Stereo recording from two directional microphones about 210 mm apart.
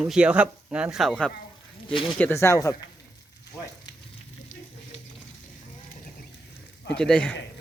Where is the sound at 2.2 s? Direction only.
15° left (ahead or behind).